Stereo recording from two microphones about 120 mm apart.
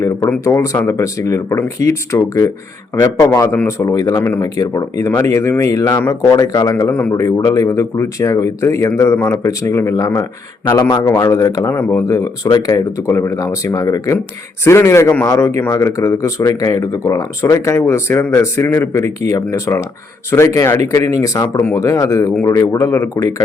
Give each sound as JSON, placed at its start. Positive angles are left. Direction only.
{"t": 0.4, "sound": "speech", "side_deg": 25}
{"t": 7.1, "sound": "a man's voice", "side_deg": 30}